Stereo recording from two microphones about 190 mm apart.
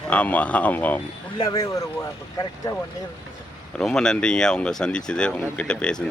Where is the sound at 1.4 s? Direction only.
20° left (ahead or behind).